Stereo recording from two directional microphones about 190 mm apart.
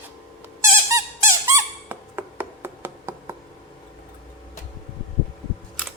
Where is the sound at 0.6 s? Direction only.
15° right (ahead or behind).